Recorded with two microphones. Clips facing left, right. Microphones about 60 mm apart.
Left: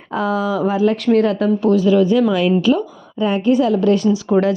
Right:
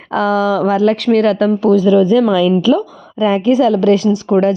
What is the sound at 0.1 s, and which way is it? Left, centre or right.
Speech, right.